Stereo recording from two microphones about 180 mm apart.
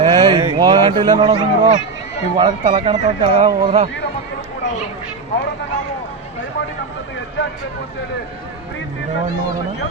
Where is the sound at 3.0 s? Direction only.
40° right (ahead or behind).